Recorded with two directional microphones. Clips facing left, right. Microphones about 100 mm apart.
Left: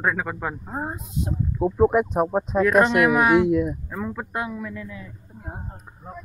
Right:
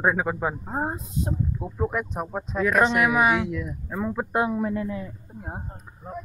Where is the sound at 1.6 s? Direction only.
60° left (ahead or behind).